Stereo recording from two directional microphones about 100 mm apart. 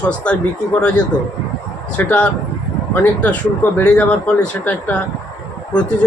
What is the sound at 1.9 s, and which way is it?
A man's voice, 15° left (ahead or behind).